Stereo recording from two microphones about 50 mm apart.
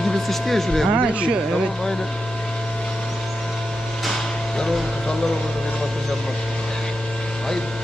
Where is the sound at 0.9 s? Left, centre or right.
Right.